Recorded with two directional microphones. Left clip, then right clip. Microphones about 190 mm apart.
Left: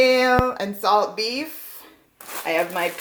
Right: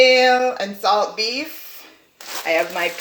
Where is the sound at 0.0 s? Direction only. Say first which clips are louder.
Right 4 dB; 50° left (ahead or behind).